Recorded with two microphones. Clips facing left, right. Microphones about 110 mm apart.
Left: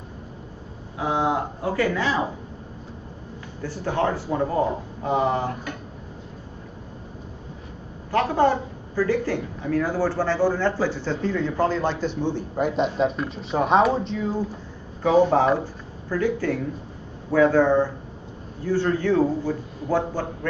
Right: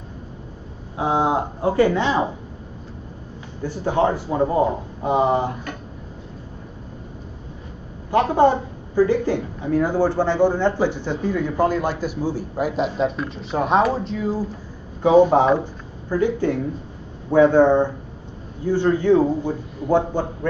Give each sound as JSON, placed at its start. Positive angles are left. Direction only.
{"t": 0.9, "sound": "a sound", "side_deg": -30}
{"t": 3.6, "sound": "a woman's voice", "side_deg": -15}
{"t": 8.1, "sound": "a woman's voice", "side_deg": -20}
{"t": 15.0, "sound": "a woman's voice", "side_deg": -15}